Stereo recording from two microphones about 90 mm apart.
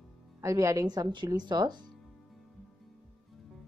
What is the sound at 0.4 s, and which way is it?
Speech, 35° right (ahead or behind).